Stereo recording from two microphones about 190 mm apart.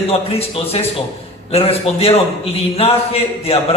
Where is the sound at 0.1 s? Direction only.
30° left (ahead or behind).